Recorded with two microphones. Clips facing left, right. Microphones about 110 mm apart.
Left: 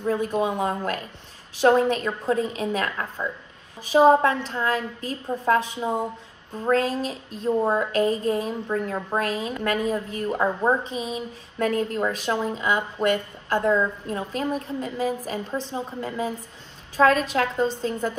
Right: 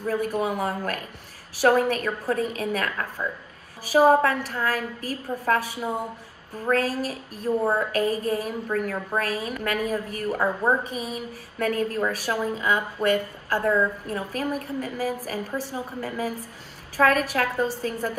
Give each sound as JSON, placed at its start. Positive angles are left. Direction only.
{"t": 0.0, "sound": "a woman's voice", "side_deg": 25}